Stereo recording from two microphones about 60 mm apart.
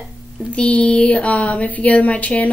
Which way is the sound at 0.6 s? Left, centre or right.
Left.